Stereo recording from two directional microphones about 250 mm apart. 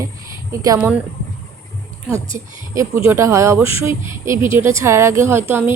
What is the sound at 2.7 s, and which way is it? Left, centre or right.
Speech, centre.